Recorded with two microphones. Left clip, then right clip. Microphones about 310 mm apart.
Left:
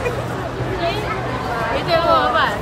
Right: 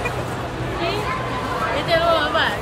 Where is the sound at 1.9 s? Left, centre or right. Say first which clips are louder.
Left 3 dB; left.